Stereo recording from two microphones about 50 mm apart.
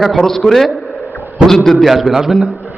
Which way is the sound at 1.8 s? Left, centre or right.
Centre.